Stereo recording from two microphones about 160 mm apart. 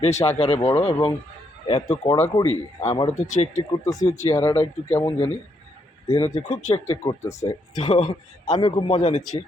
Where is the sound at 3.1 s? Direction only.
50° left (ahead or behind).